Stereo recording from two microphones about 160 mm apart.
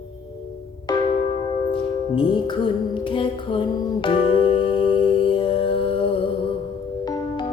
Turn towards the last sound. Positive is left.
turn(degrees=35)  # may be behind; listen again after turning